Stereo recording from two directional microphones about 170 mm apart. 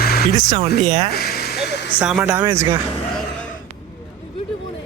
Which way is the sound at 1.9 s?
5° right (ahead or behind).